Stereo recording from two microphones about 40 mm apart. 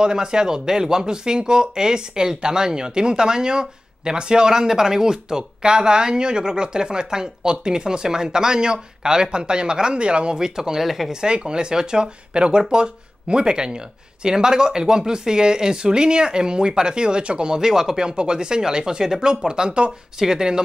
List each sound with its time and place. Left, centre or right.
0.0 s speech: centre